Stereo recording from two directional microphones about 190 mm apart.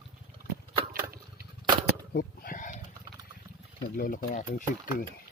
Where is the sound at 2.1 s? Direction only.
45° left (ahead or behind).